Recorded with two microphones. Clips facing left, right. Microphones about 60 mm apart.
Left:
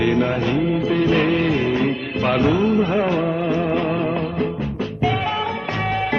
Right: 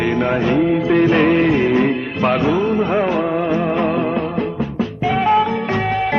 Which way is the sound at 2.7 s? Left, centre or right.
Centre.